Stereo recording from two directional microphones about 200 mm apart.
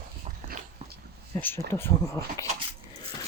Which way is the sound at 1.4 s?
10° left (ahead or behind).